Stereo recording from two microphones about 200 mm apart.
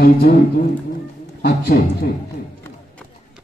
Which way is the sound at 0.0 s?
45° left (ahead or behind).